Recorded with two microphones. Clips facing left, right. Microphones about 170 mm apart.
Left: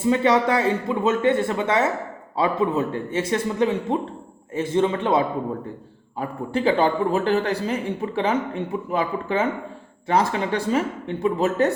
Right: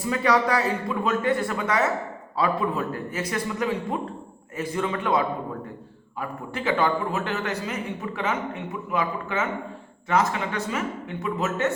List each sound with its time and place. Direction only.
0.0 s a man's voice: 25° left (ahead or behind)